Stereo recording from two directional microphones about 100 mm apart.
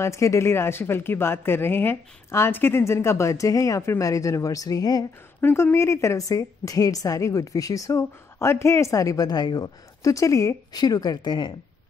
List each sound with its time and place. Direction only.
0.0 s a woman's voice: 30° left (ahead or behind)
5.4 s a woman's voice: 25° left (ahead or behind); by 11.5 s 50° left (ahead or behind)